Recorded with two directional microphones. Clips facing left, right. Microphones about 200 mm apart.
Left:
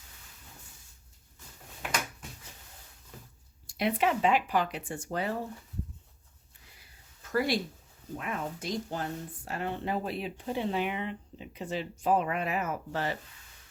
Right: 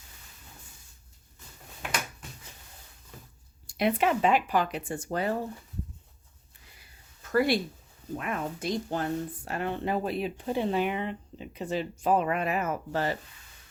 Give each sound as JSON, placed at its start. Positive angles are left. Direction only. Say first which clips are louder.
{"t": 3.7, "sound": "speech", "louder": "right 3 dB", "side_deg": -55}
{"t": 7.3, "sound": "speech", "louder": "right 4 dB", "side_deg": -60}